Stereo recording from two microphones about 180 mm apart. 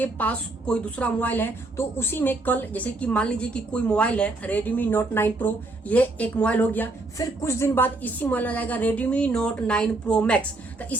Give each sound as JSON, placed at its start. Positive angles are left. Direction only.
{"t": 0.0, "sound": "a woman's voice", "side_deg": 10}